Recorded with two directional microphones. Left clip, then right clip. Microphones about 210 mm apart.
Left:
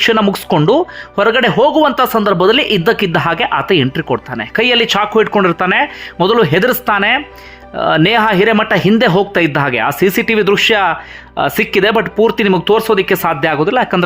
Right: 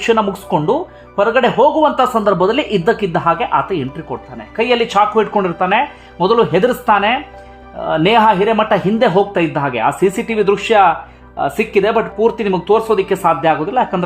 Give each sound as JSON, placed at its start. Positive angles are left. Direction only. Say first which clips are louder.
{"t": 0.0, "sound": "speech", "louder": "left 3 dB", "side_deg": 15}